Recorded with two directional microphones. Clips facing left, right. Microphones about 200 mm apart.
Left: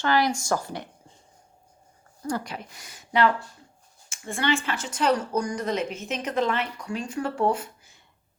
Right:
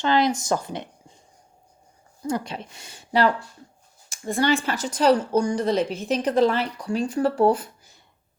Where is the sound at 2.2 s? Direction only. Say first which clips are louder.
Right 3 dB; 25° right (ahead or behind).